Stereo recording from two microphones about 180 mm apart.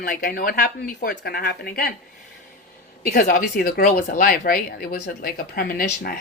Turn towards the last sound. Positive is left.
turn(degrees=55)  # may be behind; listen again after turning